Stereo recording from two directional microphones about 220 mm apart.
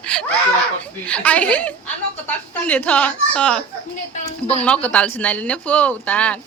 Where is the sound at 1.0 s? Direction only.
5° left (ahead or behind).